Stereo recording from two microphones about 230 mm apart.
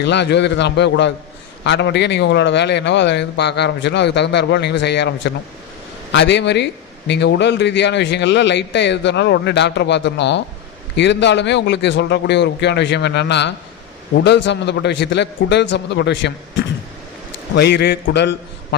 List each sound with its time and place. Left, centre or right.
0.0 s a man's voice: left
17.5 s a man's voice: left